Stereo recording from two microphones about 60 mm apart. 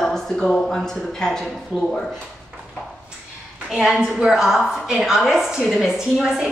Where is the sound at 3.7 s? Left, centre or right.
Centre.